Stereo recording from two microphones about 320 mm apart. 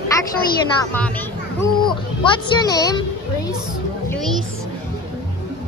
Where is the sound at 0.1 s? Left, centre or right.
Centre.